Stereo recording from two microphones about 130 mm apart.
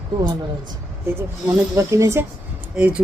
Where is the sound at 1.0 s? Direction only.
20° right (ahead or behind).